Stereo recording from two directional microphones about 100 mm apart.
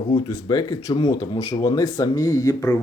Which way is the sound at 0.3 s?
40° left (ahead or behind).